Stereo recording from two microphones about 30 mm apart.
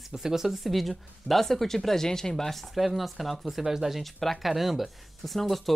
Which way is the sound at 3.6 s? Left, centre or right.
Centre.